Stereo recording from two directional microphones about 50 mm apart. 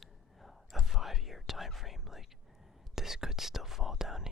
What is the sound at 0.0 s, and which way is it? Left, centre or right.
Whispering, centre.